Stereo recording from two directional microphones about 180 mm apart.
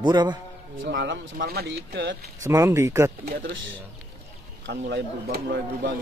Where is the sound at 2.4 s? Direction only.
15° right (ahead or behind).